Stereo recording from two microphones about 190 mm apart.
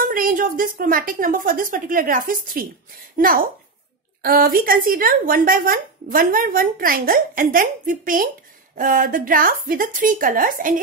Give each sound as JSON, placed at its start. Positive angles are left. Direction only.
{"t": 0.0, "sound": "speech", "side_deg": -50}